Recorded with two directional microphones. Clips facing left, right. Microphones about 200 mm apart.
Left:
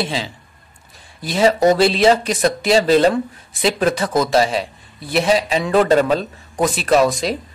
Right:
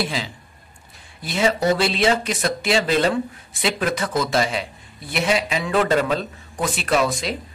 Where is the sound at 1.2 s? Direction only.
35° left (ahead or behind).